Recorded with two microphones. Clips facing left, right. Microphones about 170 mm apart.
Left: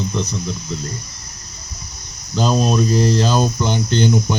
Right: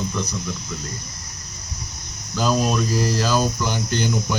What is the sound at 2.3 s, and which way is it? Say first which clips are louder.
Speech: left 3 dB; 25° left (ahead or behind).